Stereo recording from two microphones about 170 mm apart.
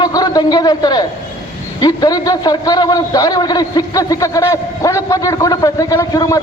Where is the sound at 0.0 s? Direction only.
20° left (ahead or behind).